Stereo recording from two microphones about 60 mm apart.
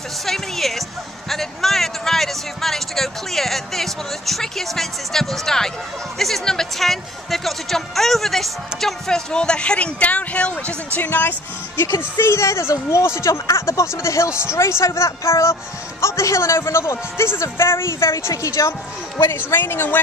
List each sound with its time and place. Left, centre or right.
0.2 s speech: centre; by 10.8 s left
11.0 s speech: left
19.2 s speech: left